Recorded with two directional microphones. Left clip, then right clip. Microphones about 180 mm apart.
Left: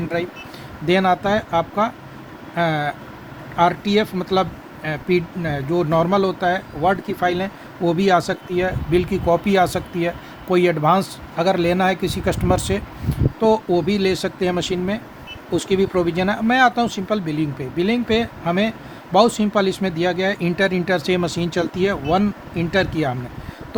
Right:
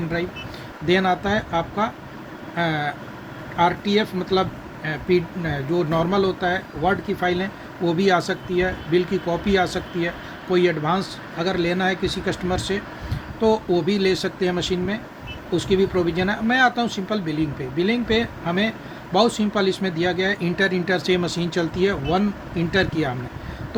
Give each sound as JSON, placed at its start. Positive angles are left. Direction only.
{"t": 0.1, "sound": "speech", "side_deg": 60}